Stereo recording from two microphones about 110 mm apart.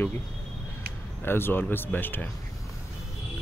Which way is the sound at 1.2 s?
20° left (ahead or behind).